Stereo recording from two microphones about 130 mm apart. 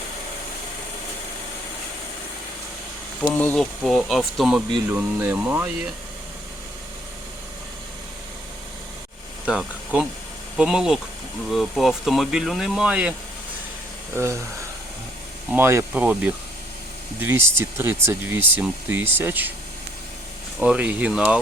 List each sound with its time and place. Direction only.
3.2 s speech: 10° left (ahead or behind)
4.9 s speech: 15° right (ahead or behind)
9.5 s speech: 5° right (ahead or behind)
14.1 s speech: 20° right (ahead or behind)
15.4 s speech: 15° right (ahead or behind)
20.6 s speech: 10° right (ahead or behind)